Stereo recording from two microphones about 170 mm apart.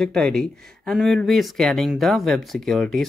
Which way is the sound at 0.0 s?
5° left (ahead or behind).